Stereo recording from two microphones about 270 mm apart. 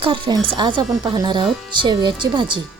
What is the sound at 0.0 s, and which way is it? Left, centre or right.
Speech, centre.